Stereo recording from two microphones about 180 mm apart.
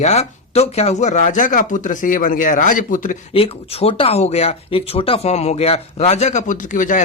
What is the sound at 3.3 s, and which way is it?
Speech, 35° left (ahead or behind).